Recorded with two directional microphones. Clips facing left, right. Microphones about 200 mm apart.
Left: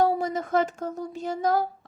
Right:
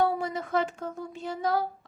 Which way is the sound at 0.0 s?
40° left (ahead or behind).